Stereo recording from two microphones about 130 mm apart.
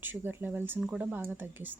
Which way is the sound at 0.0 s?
15° right (ahead or behind).